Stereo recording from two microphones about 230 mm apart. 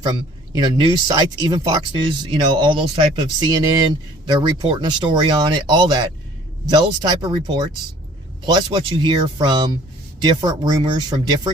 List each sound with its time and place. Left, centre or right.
0.0 s speech: centre